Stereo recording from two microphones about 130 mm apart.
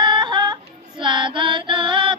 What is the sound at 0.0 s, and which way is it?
Yodeling, 35° right (ahead or behind).